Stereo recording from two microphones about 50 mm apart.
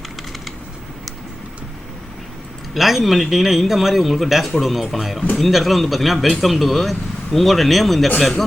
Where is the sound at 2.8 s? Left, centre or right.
Centre.